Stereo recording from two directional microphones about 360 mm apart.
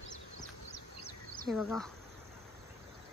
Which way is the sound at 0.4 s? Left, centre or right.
Left.